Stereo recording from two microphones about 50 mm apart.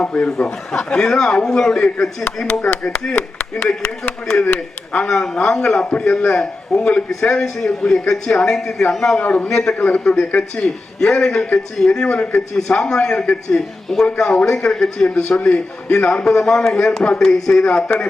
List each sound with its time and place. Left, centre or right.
0.0 s speech: left
0.3 s a man's voice: centre
2.5 s a man's voice: left
5.8 s speech: left
6.3 s a man's voice: centre
9.1 s speech: left
9.5 s a man's voice: centre
9.7 s a man's voice: left
12.5 s a man's voice: centre